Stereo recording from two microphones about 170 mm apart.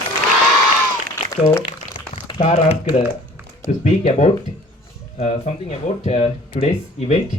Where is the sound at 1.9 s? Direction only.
30° left (ahead or behind).